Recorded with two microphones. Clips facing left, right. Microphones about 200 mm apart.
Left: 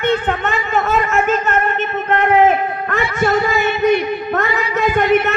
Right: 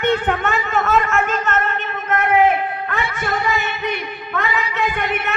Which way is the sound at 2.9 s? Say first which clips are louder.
Left 10 dB; 45° left (ahead or behind).